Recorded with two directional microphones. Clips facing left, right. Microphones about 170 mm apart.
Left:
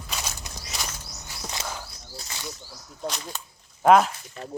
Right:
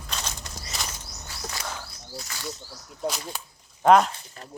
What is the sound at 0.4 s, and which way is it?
Walk, 10° left (ahead or behind).